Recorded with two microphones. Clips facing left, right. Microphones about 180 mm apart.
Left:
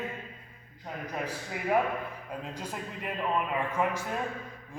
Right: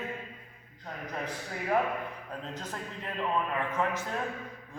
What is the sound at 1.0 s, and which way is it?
Speech, 10° left (ahead or behind).